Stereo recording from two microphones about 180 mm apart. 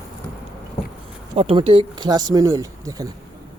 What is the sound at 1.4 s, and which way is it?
Speech, 35° right (ahead or behind).